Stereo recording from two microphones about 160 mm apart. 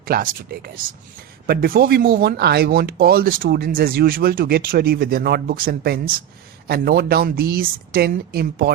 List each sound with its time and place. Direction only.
0.0 s speech: 70° right (ahead or behind)